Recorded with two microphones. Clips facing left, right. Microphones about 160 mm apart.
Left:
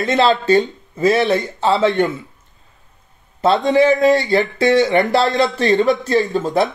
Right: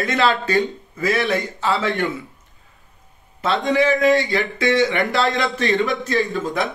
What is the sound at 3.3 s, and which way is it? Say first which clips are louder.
Speech: left 5 dB; 35° left (ahead or behind).